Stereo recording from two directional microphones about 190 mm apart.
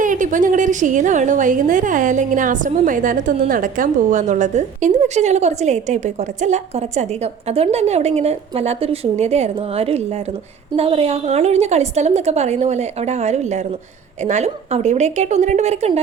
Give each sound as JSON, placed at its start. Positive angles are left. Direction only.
{"t": 0.0, "sound": "a woman's voice", "side_deg": -45}